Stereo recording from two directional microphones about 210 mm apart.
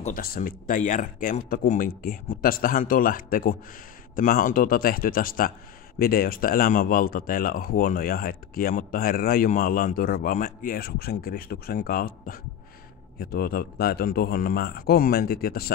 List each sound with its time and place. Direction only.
0.0 s speech: 45° left (ahead or behind)